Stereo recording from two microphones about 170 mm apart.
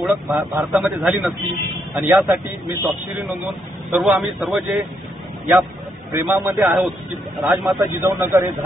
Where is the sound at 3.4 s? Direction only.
Centre (ahead or behind).